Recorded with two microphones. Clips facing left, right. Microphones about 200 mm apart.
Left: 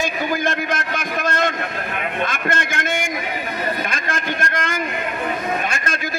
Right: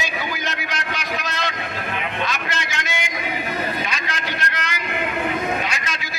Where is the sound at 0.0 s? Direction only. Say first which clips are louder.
Left 6 dB; 50° left (ahead or behind).